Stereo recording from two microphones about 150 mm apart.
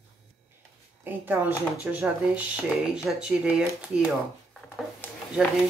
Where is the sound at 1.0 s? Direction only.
15° right (ahead or behind).